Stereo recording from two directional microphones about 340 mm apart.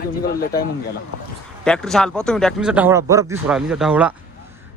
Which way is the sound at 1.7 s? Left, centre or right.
Centre.